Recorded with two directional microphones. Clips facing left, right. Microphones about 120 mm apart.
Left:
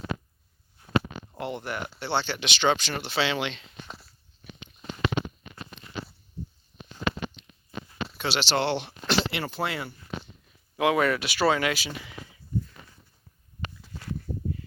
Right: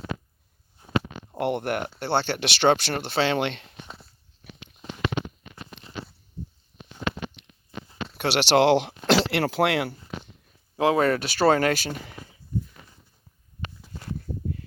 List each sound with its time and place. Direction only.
1.4 s speech: 60° right (ahead or behind)
7.4 s a sound: 70° right (ahead or behind)
8.1 s speech: 60° right (ahead or behind); by 9.9 s 75° right (ahead or behind)
10.8 s speech: 35° right (ahead or behind)